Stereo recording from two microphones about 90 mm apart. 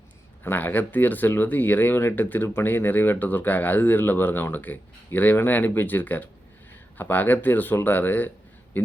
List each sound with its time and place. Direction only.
0.4 s speech: 20° left (ahead or behind)